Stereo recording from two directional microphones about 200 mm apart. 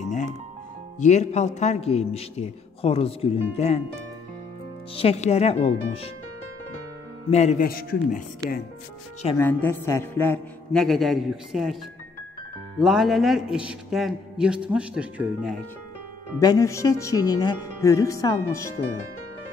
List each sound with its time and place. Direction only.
0.9 s a man's voice: 35° left (ahead or behind)
4.9 s speech: 30° left (ahead or behind)
7.2 s a man's voice: 35° left (ahead or behind)
7.6 s a man's voice: 45° left (ahead or behind)
9.4 s a man's voice: 10° left (ahead or behind)
16.3 s a man's voice: 15° left (ahead or behind)